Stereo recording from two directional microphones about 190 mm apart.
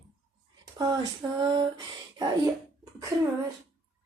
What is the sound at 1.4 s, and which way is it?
Speech, 20° right (ahead or behind).